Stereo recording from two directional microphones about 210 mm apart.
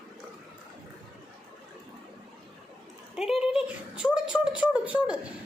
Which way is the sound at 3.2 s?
Centre (ahead or behind).